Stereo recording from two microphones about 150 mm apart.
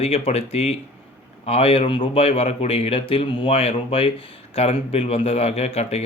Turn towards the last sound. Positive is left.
turn(degrees=45)  # may be behind; listen again after turning